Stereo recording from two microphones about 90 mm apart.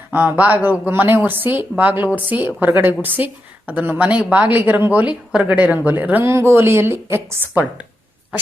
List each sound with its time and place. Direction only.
0.1 s speech: 20° right (ahead or behind)
6.2 s speech: 30° right (ahead or behind)